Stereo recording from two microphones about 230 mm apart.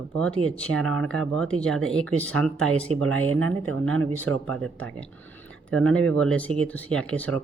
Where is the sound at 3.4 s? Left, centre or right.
Right.